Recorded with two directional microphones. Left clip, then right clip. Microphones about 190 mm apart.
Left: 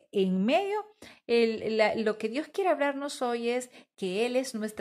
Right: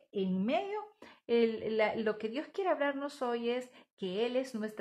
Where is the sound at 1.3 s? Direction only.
30° left (ahead or behind).